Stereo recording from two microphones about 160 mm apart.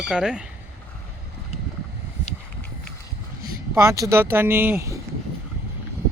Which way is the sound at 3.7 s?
15° right (ahead or behind).